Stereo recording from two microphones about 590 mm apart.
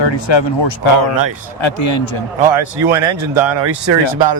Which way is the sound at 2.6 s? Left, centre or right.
Right.